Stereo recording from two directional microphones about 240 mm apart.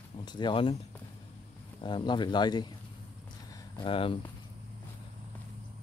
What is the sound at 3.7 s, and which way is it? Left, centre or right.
Speech, left.